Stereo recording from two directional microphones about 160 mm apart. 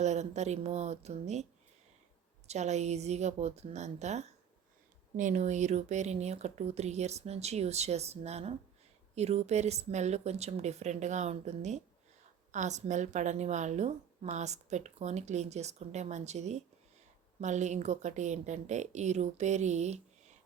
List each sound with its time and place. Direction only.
0.0 s a woman's voice: 45° right (ahead or behind)
2.5 s a woman's voice: 45° right (ahead or behind)